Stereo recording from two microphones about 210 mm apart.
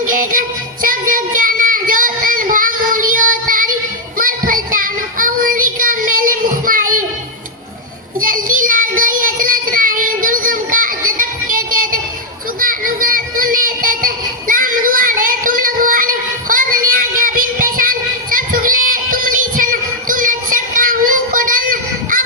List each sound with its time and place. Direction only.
0.1 s music: 40° right (ahead or behind)
4.2 s child singing: 40° right (ahead or behind)
8.2 s child singing: 40° right (ahead or behind)